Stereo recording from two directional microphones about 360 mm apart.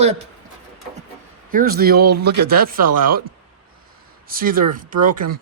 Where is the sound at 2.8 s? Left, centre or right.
Right.